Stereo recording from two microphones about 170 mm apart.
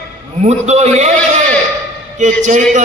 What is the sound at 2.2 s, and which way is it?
Speech, 45° right (ahead or behind).